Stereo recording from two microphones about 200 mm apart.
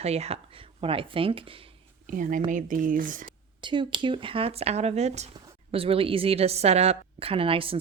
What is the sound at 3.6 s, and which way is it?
A woman's voice, 25° right (ahead or behind).